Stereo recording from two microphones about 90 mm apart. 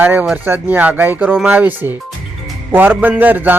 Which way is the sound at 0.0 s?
20° right (ahead or behind).